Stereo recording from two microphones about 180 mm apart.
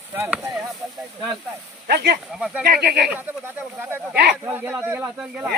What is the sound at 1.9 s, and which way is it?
Speech, 60° right (ahead or behind).